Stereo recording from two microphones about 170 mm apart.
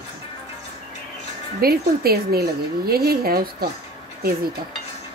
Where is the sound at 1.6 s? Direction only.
65° right (ahead or behind).